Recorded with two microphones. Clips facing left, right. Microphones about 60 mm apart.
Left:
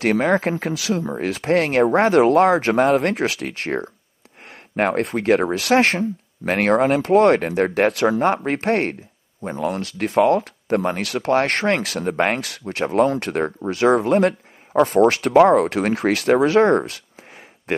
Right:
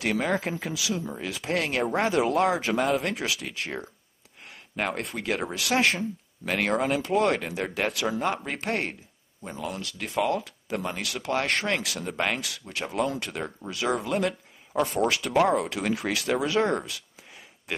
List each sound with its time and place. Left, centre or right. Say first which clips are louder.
0.0 s speech: left 8 dB; left